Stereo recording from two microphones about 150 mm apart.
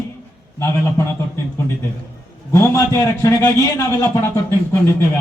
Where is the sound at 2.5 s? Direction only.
20° left (ahead or behind).